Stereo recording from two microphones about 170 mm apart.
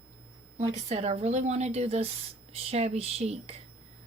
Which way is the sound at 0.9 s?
35° right (ahead or behind).